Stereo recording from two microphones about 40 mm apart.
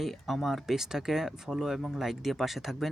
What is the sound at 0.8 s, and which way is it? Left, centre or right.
Speech, centre.